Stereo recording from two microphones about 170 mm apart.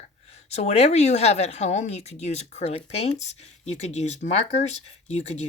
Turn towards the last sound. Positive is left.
turn(degrees=40)  # may be behind; listen again after turning